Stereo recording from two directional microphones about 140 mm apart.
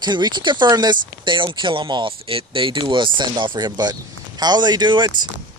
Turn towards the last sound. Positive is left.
turn(degrees=-35)  # may be behind; listen again after turning